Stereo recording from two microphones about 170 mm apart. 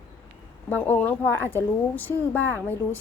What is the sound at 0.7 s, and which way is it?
A woman's voice, 10° left (ahead or behind).